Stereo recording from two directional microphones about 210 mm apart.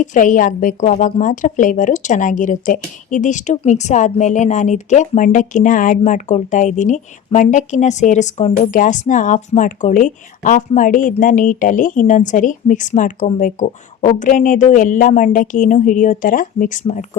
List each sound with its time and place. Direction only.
0.0 s a woman's voice: 35° left (ahead or behind)